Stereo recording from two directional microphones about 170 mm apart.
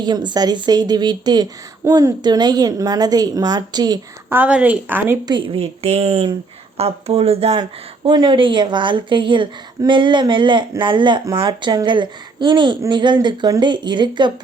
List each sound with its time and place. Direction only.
0.0 s a woman's voice: 25° right (ahead or behind)
4.4 s speech: 10° right (ahead or behind)
5.3 s speech: 35° right (ahead or behind)
7.6 s a woman's voice: 25° right (ahead or behind)